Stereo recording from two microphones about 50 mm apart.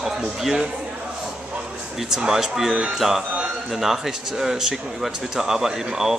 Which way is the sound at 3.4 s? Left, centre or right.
Centre.